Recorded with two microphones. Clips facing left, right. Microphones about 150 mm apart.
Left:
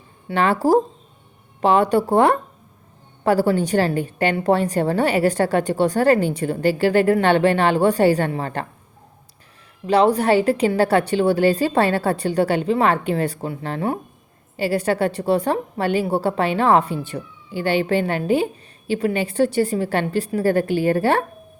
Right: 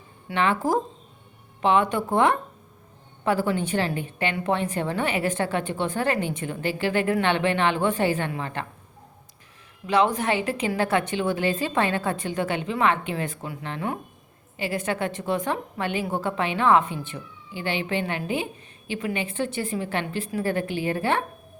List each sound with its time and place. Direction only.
0.3 s a woman's voice: 35° left (ahead or behind)
9.8 s a woman's voice: 35° left (ahead or behind)